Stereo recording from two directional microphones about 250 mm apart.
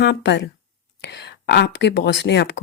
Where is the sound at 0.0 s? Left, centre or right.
Left.